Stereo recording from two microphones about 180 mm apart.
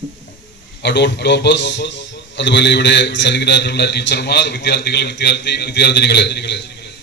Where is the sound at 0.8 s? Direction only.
70° left (ahead or behind).